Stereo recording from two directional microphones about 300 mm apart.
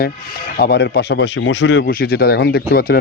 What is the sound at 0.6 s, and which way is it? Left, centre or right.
Speech, left.